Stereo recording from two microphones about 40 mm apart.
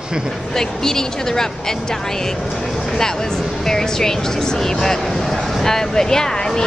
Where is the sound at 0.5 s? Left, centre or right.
Centre.